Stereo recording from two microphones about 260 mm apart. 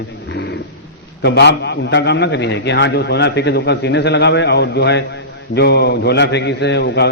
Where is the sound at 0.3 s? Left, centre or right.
Left.